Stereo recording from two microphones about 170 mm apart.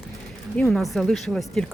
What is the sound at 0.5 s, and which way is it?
Speech, centre (ahead or behind).